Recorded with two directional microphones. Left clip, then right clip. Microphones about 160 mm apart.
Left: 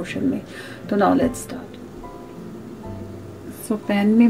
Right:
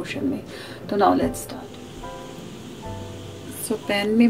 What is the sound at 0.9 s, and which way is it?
Speech, 60° left (ahead or behind).